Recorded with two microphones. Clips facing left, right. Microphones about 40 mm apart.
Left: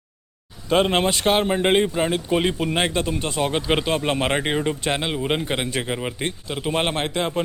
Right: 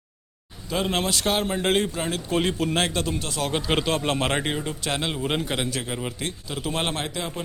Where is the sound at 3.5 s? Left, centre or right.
Centre.